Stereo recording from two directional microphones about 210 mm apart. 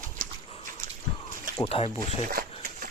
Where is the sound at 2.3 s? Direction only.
45° right (ahead or behind).